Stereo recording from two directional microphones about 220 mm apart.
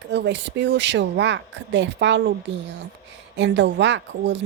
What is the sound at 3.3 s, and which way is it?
Speech, 55° right (ahead or behind).